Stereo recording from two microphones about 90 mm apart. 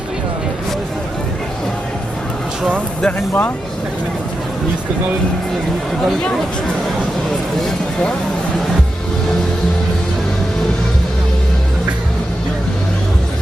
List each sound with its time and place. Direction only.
3.0 s speech: 15° left (ahead or behind)
6.1 s speech: 5° left (ahead or behind)